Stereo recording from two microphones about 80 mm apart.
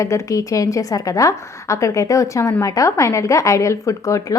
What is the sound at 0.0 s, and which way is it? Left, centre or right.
A woman's voice, left.